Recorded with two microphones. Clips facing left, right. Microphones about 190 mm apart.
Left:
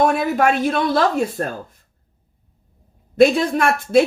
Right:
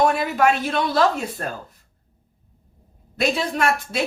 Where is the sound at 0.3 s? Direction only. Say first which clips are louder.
Left 2 dB; 50° left (ahead or behind).